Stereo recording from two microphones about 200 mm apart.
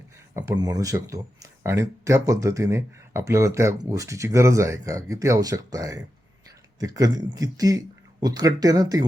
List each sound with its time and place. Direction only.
0.3 s speech: 20° right (ahead or behind)